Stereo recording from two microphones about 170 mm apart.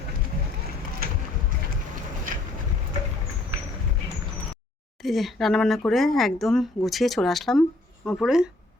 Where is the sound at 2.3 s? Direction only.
55° right (ahead or behind).